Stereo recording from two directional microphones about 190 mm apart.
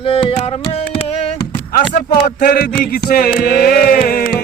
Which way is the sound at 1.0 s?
30° left (ahead or behind).